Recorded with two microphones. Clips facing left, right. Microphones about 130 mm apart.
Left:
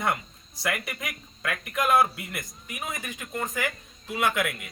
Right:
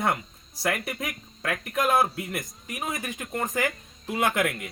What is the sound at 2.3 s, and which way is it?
Speech, 40° right (ahead or behind).